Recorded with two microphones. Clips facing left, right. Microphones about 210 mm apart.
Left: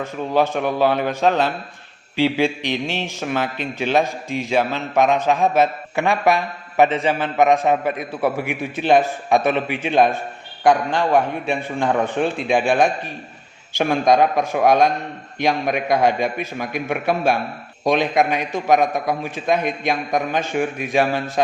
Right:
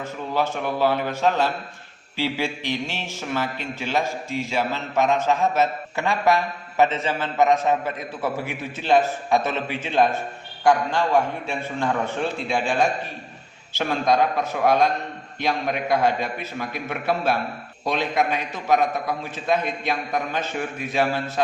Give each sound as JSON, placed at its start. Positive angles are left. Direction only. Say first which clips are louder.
{"t": 0.3, "sound": "a man's voice", "louder": "left 5 dB", "side_deg": 20}
{"t": 13.7, "sound": "a man's voice", "louder": "left 5 dB", "side_deg": 15}